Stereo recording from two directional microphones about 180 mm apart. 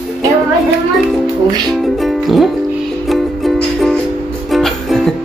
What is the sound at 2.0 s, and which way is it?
Music, centre (ahead or behind).